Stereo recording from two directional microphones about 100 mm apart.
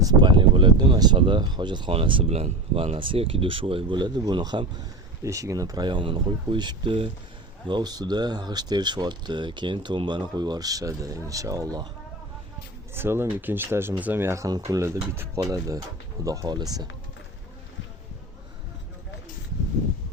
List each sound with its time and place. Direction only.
0.0 s speech: 45° right (ahead or behind)
1.9 s speech: 65° right (ahead or behind); by 4.6 s 50° right (ahead or behind)
5.2 s speech: 35° right (ahead or behind)
5.8 s speech: 55° right (ahead or behind)
7.7 s speech: 45° right (ahead or behind)
12.9 s speech: 25° right (ahead or behind)
14.8 s speech: 25° right (ahead or behind)
15.4 s speech: 35° right (ahead or behind)